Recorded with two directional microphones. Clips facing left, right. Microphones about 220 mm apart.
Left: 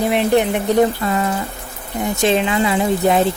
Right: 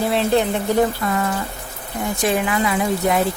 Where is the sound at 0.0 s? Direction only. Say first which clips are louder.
Left 2 dB; 20° left (ahead or behind).